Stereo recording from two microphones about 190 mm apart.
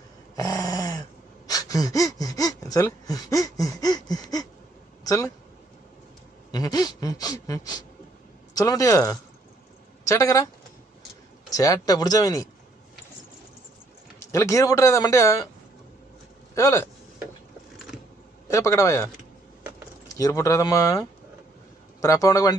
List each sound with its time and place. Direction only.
0.4 s dog: 20° left (ahead or behind)
1.5 s gasp: 20° left (ahead or behind)
5.0 s speech: 20° left (ahead or behind)
6.5 s a sound: 20° left (ahead or behind)
8.5 s a man's voice: 20° left (ahead or behind)
11.5 s speech: 20° left (ahead or behind)
14.3 s a man's voice: 15° left (ahead or behind)
16.5 s speech: 15° left (ahead or behind)
17.9 s typing: 5° right (ahead or behind)
18.5 s a man's voice: 15° left (ahead or behind)
20.2 s a man's voice: 20° left (ahead or behind)